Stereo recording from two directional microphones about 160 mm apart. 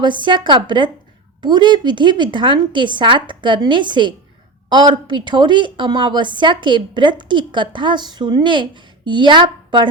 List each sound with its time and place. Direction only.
0.0 s a woman's voice: 30° right (ahead or behind)